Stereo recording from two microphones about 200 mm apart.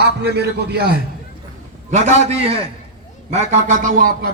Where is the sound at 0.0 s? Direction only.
55° right (ahead or behind).